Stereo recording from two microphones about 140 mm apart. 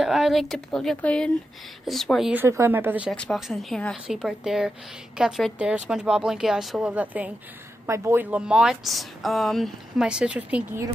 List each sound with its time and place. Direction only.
0.0 s a woman's voice: centre (ahead or behind)
2.3 s speech: 15° right (ahead or behind)
3.1 s a woman's voice: 5° left (ahead or behind)